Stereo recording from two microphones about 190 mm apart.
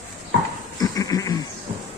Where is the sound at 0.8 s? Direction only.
20° left (ahead or behind).